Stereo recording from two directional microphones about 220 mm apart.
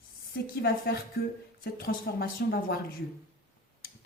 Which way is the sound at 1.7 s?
45° left (ahead or behind).